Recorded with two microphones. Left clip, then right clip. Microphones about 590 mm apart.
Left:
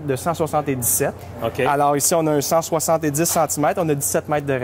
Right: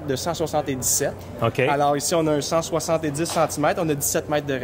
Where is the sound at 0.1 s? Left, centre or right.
Left.